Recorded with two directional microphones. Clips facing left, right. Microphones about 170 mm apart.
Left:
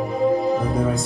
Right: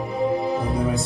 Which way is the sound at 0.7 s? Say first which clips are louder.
Left 2 dB; 40° left (ahead or behind).